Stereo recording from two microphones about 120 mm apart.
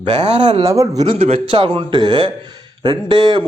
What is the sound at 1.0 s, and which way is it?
A man's voice, 55° right (ahead or behind).